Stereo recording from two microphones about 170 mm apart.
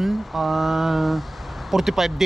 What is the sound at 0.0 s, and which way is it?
Speech, centre (ahead or behind).